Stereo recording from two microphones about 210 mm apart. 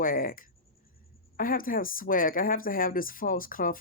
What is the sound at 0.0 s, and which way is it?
Speech, 40° left (ahead or behind).